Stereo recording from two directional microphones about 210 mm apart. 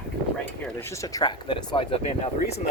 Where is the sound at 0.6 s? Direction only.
10° left (ahead or behind).